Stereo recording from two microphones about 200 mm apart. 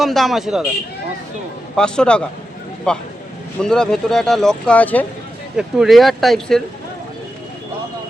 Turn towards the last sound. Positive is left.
turn(degrees=0)  # may be behind; listen again after turning